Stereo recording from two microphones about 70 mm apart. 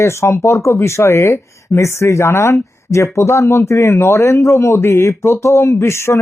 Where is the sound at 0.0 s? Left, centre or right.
Left.